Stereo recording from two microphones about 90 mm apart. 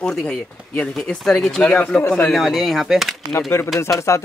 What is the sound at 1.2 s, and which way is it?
Speech, 5° left (ahead or behind).